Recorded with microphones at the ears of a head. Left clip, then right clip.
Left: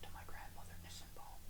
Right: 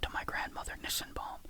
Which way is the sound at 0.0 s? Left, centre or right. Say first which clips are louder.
Right 18 dB; right.